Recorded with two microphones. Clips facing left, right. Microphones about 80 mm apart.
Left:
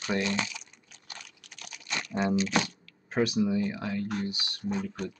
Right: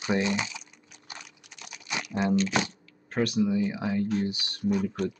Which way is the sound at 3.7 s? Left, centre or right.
Centre.